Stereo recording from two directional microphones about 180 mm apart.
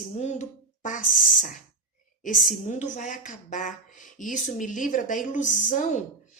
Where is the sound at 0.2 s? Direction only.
40° left (ahead or behind).